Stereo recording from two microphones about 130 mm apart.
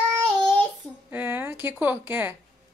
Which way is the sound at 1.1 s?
15° right (ahead or behind).